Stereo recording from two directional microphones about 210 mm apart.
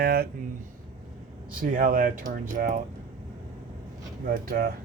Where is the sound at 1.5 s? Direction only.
40° right (ahead or behind).